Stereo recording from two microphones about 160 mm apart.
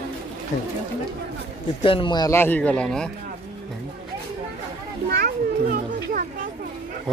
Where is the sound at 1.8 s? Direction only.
35° left (ahead or behind).